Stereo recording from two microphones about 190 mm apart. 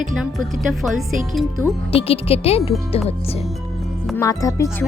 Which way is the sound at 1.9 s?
30° left (ahead or behind).